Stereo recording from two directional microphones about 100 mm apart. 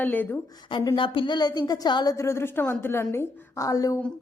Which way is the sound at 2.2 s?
25° left (ahead or behind).